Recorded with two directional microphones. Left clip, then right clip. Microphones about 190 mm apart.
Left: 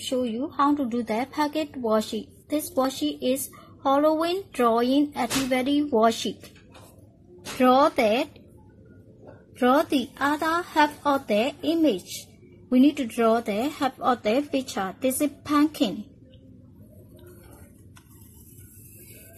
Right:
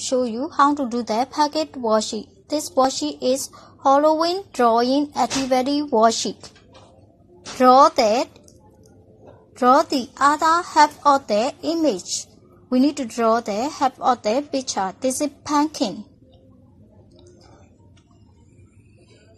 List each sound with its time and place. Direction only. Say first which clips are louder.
0.1 s speech: right 5 dB; 20° right (ahead or behind)
7.5 s speech: right 7 dB; 10° right (ahead or behind)
9.6 s speech: right 5 dB; 5° right (ahead or behind)